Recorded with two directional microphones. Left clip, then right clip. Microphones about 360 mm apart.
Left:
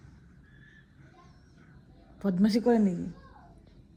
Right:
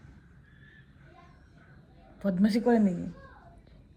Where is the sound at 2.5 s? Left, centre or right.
Centre.